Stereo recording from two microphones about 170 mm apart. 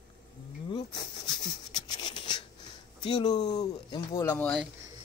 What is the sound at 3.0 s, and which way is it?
Speech, 25° left (ahead or behind).